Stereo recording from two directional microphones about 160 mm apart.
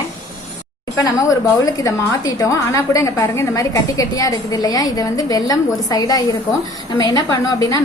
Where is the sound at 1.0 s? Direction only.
20° left (ahead or behind).